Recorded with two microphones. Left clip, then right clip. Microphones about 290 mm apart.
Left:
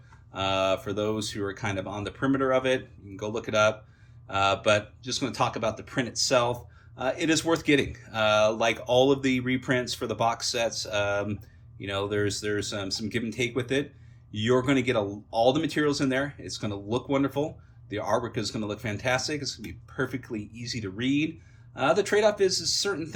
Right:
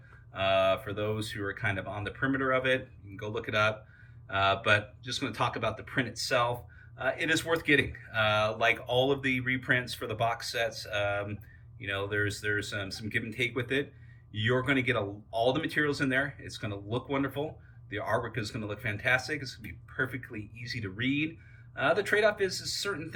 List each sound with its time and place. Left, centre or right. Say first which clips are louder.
0.3 s speech: even; centre